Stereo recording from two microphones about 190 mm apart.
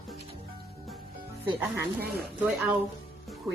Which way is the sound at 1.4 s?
10° right (ahead or behind).